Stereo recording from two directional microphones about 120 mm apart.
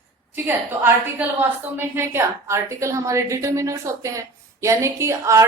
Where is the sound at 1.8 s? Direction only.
20° right (ahead or behind).